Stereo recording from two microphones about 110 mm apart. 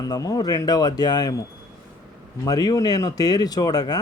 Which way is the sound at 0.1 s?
35° left (ahead or behind).